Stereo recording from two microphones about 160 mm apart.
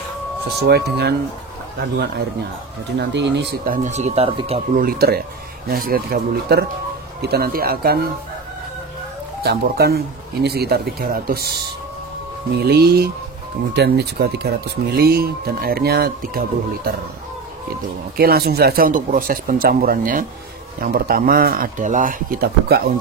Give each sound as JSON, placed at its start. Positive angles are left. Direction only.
{"t": 0.6, "sound": "speech", "side_deg": -90}
{"t": 4.7, "sound": "speech", "side_deg": -70}
{"t": 9.4, "sound": "speech", "side_deg": -90}
{"t": 12.6, "sound": "speech", "side_deg": -80}
{"t": 18.1, "sound": "speech", "side_deg": -70}